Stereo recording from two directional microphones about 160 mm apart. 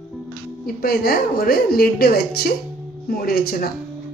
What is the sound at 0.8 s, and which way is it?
A woman's voice, 70° left (ahead or behind).